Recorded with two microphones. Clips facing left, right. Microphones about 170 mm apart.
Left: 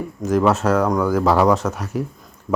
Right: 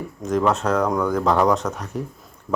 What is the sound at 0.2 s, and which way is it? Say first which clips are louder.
Speech: left 3 dB; 5° left (ahead or behind).